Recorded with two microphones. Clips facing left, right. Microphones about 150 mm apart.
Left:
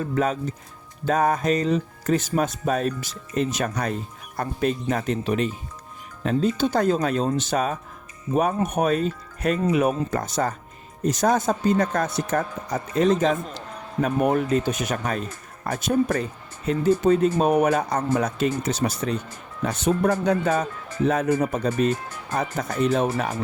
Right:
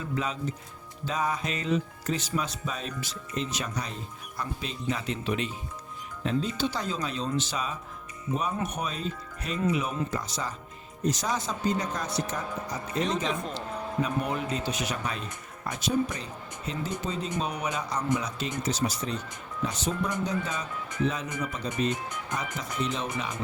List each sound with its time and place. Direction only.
0.0 s speech: 50° left (ahead or behind)